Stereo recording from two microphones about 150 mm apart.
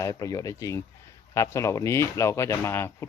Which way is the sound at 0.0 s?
20° left (ahead or behind).